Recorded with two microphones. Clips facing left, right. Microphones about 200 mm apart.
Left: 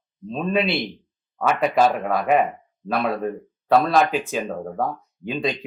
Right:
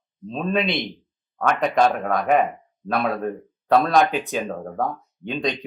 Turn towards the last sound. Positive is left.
turn(degrees=5)  # may be behind; listen again after turning